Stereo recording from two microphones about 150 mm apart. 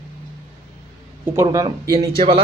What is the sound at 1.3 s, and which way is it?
Speech, 20° right (ahead or behind).